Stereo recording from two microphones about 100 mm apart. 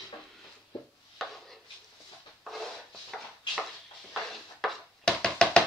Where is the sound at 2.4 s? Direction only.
Centre (ahead or behind).